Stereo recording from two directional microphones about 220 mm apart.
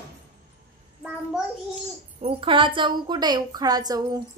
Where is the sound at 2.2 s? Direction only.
25° right (ahead or behind).